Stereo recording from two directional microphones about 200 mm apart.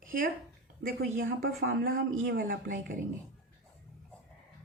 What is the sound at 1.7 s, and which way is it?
Speech, 45° right (ahead or behind).